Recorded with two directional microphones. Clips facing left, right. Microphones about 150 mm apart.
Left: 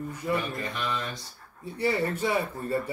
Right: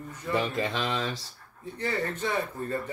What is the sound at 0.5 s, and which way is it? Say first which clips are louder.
Speech: right 3 dB; 90° right.